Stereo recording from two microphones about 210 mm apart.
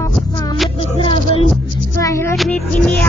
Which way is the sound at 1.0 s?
25° left (ahead or behind).